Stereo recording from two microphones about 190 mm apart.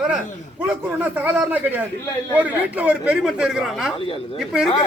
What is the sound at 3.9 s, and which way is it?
Speech, 30° left (ahead or behind).